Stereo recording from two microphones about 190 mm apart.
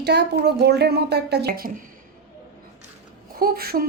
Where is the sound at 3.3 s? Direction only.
50° right (ahead or behind).